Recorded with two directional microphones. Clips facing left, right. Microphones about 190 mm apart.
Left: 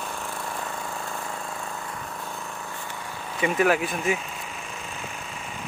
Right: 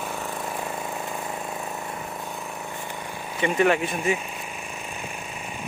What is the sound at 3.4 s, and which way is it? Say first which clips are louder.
Speech: right 1 dB; 5° left (ahead or behind).